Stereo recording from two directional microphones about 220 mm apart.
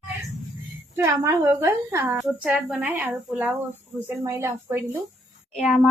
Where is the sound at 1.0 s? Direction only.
15° right (ahead or behind).